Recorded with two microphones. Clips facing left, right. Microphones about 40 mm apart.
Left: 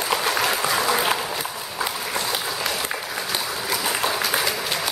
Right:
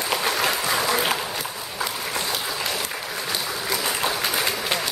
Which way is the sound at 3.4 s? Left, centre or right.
Centre.